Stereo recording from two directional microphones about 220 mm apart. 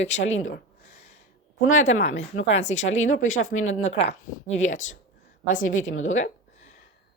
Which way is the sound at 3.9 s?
25° left (ahead or behind).